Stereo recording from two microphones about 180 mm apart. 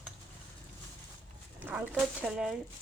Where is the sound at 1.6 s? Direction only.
10° right (ahead or behind).